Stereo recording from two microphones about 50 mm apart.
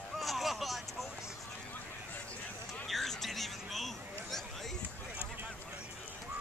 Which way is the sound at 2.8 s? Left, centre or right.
Centre.